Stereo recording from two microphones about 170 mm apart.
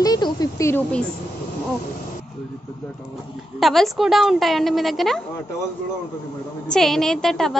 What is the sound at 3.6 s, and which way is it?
A woman's voice, centre (ahead or behind).